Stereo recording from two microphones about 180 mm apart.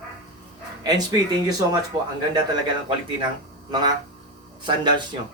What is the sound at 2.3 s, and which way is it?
Speech, 25° right (ahead or behind).